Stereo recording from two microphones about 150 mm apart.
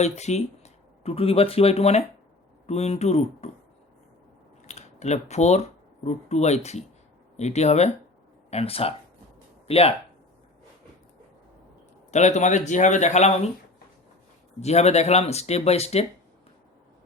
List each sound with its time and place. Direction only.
0.0 s speech: 50° left (ahead or behind)
4.6 s speech: 50° left (ahead or behind)
12.1 s speech: 50° left (ahead or behind)
14.6 s speech: 45° left (ahead or behind)